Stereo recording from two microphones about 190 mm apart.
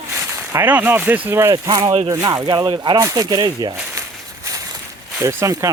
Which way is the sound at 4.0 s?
15° right (ahead or behind).